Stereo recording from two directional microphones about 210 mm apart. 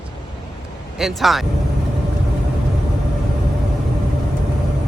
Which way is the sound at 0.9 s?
Centre (ahead or behind).